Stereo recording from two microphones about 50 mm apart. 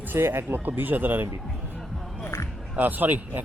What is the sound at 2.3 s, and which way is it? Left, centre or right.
Music, left.